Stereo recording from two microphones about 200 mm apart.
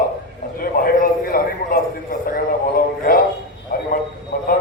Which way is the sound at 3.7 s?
45° left (ahead or behind).